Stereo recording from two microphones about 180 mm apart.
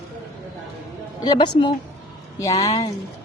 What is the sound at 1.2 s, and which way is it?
Speech, 25° left (ahead or behind).